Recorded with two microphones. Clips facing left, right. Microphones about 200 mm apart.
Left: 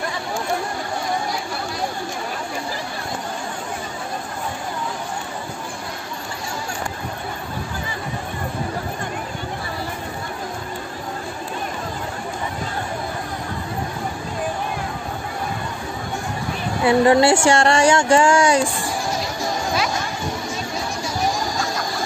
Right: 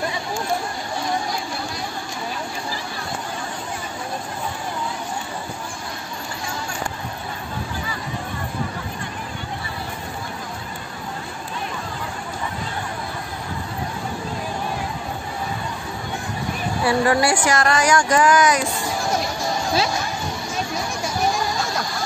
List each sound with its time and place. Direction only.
16.8 s speech: 25° left (ahead or behind)